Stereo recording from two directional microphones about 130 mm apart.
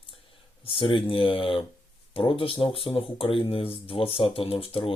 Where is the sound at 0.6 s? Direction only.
45° left (ahead or behind).